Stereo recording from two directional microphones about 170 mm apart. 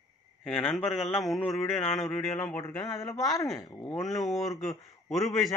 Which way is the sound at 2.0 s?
15° left (ahead or behind).